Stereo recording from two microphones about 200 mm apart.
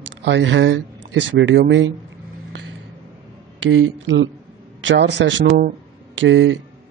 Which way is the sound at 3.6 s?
75° right (ahead or behind).